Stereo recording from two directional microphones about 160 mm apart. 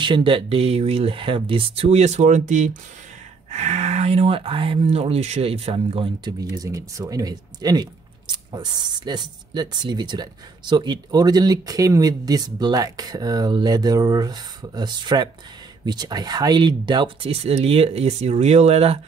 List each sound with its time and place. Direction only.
0.0 s speech: 30° right (ahead or behind)